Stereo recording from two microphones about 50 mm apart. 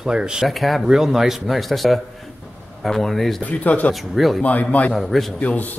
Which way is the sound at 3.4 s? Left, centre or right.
Left.